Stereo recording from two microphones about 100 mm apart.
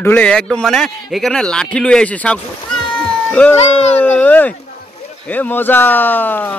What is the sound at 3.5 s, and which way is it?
Speech, 90° left.